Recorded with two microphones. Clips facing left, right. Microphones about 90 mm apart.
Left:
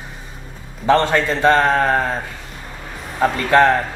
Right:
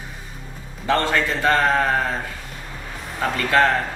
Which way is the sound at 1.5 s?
Centre (ahead or behind).